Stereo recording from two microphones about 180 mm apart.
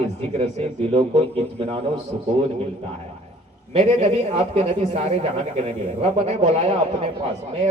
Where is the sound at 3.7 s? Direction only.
35° right (ahead or behind).